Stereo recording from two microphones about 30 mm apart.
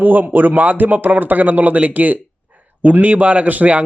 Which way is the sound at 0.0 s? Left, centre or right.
Right.